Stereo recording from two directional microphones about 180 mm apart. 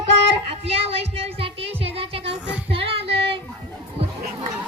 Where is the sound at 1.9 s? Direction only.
30° right (ahead or behind).